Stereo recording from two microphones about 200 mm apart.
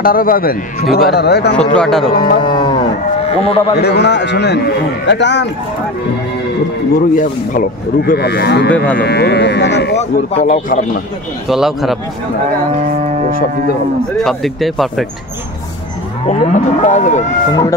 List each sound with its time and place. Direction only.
0.0 s speech: 45° left (ahead or behind)
1.7 s speech: 5° left (ahead or behind)
2.1 s speech: 45° left (ahead or behind)
2.4 s cattle: 25° left (ahead or behind)
3.4 s speech: 25° left (ahead or behind)
3.8 s speech: 55° left (ahead or behind)
7.0 s speech: 40° left (ahead or behind); by 9.9 s 60° left (ahead or behind)
9.9 s speech: 30° left (ahead or behind)
11.4 s speech: centre (ahead or behind)
14.1 s speech: centre (ahead or behind)
16.3 s speech: 35° left (ahead or behind)
17.5 s speech: 20° left (ahead or behind)